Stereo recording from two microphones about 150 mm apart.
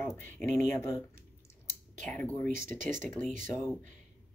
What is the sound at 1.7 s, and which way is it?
Clicking, 60° right (ahead or behind).